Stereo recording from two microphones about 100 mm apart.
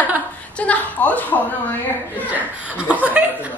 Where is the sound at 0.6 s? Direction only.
15° left (ahead or behind).